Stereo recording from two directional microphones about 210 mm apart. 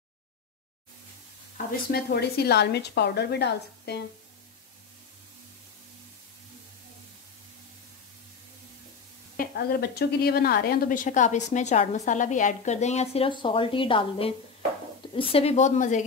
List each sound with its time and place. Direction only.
1.9 s a woman's voice: 50° left (ahead or behind)
9.4 s a woman's voice: 45° left (ahead or behind)